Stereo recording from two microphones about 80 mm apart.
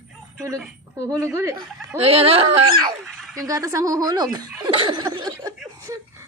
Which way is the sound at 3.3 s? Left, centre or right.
Right.